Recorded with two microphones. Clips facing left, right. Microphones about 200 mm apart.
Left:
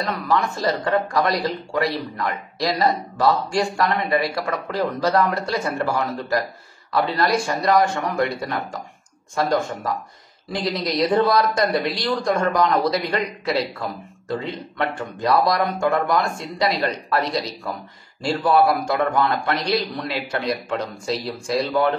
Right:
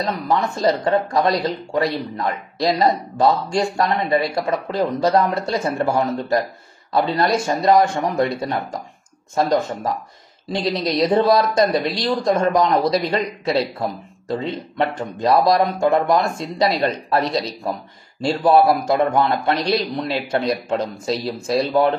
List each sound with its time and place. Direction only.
0.0 s a man's voice: 25° right (ahead or behind)